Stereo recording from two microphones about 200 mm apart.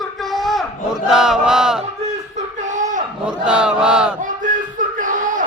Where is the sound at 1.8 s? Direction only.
35° right (ahead or behind).